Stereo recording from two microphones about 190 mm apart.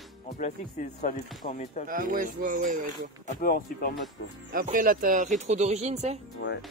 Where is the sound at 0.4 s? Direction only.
40° left (ahead or behind).